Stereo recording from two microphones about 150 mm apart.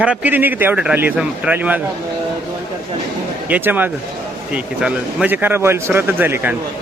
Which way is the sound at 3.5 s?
10° right (ahead or behind).